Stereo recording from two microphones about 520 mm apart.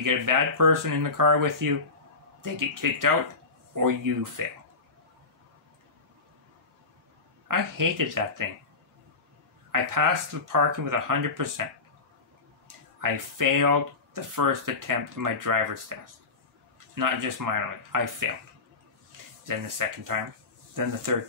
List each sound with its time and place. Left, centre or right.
0.0 s speech: right
7.4 s speech: right
9.7 s speech: right
13.0 s speech: right
19.4 s speech: right